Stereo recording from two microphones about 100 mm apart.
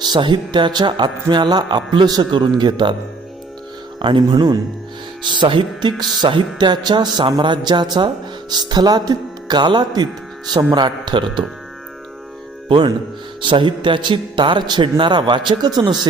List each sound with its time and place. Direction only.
0.0 s music: 50° right (ahead or behind)
4.0 s music: 50° right (ahead or behind)
12.6 s speech: 55° right (ahead or behind)
13.4 s music: 55° right (ahead or behind)